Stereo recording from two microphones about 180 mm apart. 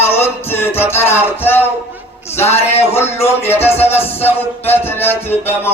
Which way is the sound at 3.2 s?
15° left (ahead or behind).